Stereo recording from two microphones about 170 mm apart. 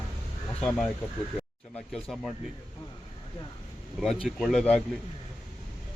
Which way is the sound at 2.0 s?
Centre (ahead or behind).